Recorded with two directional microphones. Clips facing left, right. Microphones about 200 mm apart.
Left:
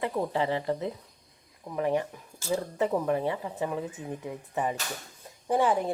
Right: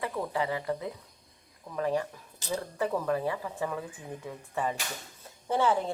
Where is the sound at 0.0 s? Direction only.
25° left (ahead or behind).